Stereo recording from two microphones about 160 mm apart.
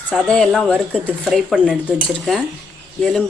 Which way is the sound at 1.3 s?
Centre (ahead or behind).